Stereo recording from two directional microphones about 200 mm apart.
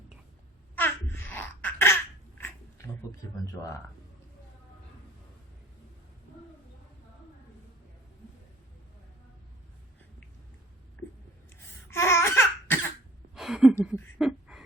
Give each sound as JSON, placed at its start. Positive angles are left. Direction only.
{"t": 0.8, "sound": "babbling", "side_deg": 10}
{"t": 3.4, "sound": "speech", "side_deg": 15}
{"t": 11.4, "sound": "laughter", "side_deg": 15}
{"t": 13.3, "sound": "a sound", "side_deg": 0}